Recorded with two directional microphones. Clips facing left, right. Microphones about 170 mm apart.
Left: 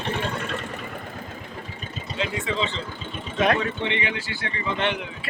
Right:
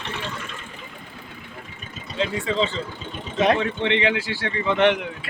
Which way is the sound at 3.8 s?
85° right.